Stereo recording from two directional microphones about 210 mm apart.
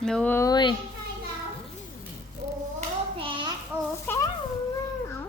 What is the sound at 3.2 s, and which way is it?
Child singing, 25° right (ahead or behind).